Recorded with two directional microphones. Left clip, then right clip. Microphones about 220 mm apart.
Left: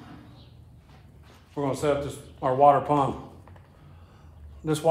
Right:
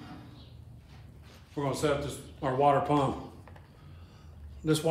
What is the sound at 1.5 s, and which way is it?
Speech, 40° left (ahead or behind).